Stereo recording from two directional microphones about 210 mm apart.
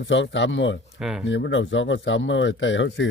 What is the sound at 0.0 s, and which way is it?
Speech, 60° left (ahead or behind).